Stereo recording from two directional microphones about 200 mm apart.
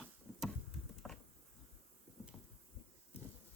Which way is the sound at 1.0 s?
Centre (ahead or behind).